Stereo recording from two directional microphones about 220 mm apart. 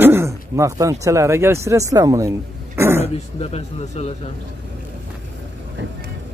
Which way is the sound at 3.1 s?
30° left (ahead or behind).